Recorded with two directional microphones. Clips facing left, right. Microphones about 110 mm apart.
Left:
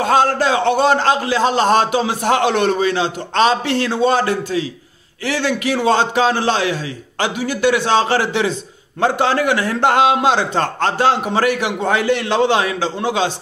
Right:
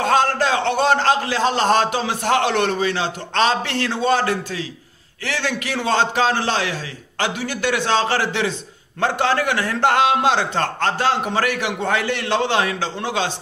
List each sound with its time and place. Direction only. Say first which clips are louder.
0.0 s a man's voice: left 3 dB; 15° left (ahead or behind)